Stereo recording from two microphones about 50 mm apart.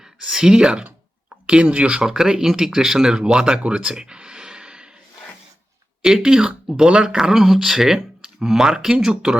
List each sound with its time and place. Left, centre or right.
0.2 s speech: centre
2.0 s speech: centre
6.2 s speech: centre